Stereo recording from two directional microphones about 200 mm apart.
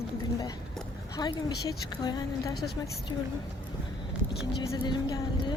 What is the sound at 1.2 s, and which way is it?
Speech, 20° left (ahead or behind).